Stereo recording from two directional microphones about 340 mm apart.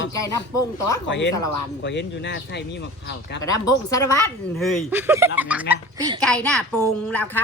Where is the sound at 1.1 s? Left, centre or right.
Left.